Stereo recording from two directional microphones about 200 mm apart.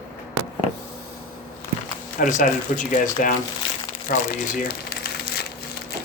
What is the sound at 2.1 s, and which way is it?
Speech, 40° left (ahead or behind).